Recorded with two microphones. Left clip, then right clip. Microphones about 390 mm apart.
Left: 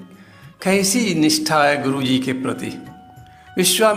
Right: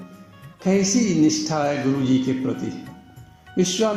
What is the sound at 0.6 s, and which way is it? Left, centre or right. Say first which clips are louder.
Music: left 3 dB; left.